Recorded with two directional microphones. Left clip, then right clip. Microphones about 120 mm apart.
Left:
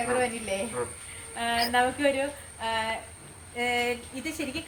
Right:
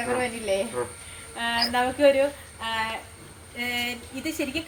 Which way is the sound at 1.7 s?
20° left (ahead or behind).